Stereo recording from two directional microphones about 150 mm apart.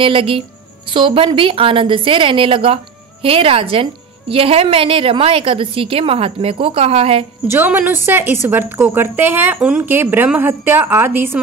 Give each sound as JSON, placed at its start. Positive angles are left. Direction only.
{"t": 0.0, "sound": "a woman's voice", "side_deg": -35}
{"t": 7.4, "sound": "a woman's voice", "side_deg": -15}